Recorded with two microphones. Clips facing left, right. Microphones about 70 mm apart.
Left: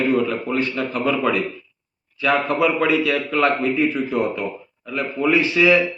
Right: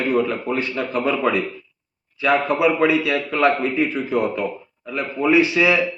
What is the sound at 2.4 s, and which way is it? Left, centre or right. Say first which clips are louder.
A man's voice: right 1 dB; centre.